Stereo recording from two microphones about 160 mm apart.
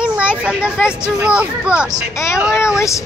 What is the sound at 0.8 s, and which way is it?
Speech, 5° right (ahead or behind).